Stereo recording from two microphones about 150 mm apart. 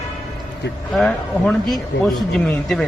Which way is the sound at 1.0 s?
5° left (ahead or behind).